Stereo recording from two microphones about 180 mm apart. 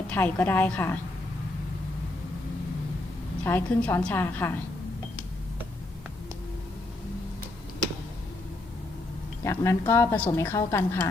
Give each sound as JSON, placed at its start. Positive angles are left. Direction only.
{"t": 0.1, "sound": "a woman's voice", "side_deg": 10}
{"t": 3.4, "sound": "a woman's voice", "side_deg": 10}
{"t": 9.4, "sound": "a woman's voice", "side_deg": 15}